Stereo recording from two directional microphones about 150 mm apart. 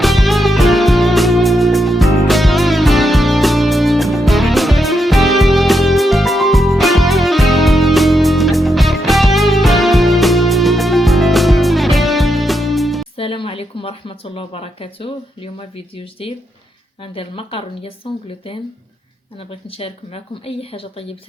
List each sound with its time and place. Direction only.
0.0 s music: centre (ahead or behind)
13.1 s a sound: 35° left (ahead or behind)
14.3 s speech: 40° left (ahead or behind)
17.0 s speech: 40° left (ahead or behind)